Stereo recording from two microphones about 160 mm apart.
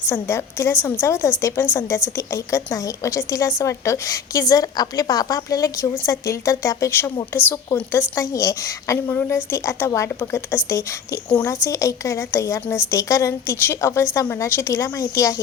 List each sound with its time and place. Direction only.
0.1 s a woman's voice: 15° left (ahead or behind)